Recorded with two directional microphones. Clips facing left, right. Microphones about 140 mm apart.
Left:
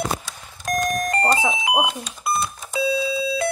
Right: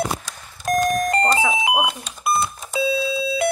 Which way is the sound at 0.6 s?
30° right (ahead or behind).